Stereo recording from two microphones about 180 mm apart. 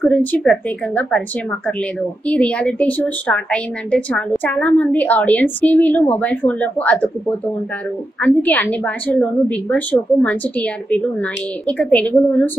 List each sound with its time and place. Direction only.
0.0 s a woman's voice: 10° left (ahead or behind)